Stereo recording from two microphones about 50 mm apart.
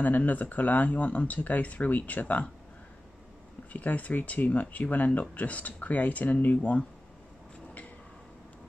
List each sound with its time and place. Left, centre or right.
0.0 s speech: left
3.7 s speech: left